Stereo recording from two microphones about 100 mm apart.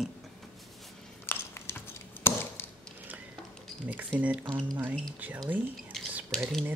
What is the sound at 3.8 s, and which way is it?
Speech, 15° right (ahead or behind).